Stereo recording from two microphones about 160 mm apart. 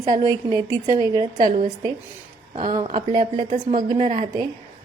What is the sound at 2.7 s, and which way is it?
Speech, 30° right (ahead or behind).